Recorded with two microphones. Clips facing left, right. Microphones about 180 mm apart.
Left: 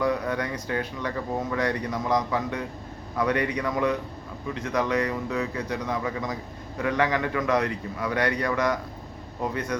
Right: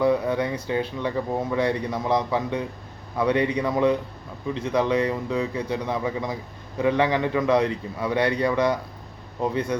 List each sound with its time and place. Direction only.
0.0 s a man's voice: 25° right (ahead or behind)